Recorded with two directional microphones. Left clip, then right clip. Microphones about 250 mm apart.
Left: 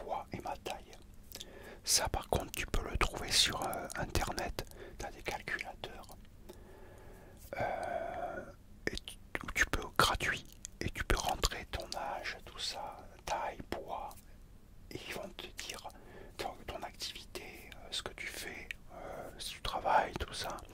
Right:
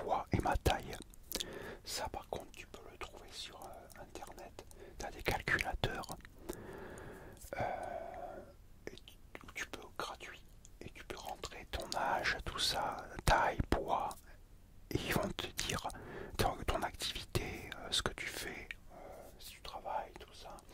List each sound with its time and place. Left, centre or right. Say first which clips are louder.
0.0 s whispering: right 4 dB; right
2.0 s speech: left 6 dB; centre
2.5 s speech: left 13 dB; left
5.2 s speech: right 5 dB; right
5.8 s whispering: right 7 dB; right
7.4 s gasp: left 3 dB; centre
7.9 s whispering: left 6 dB; centre
8.8 s whispering: left 11 dB; left
10.8 s whispering: left 12 dB; left
12.0 s whispering: right 8 dB; right
18.1 s whispering: even; right
18.9 s whispering: left 7 dB; left
19.8 s whispering: left 11 dB; left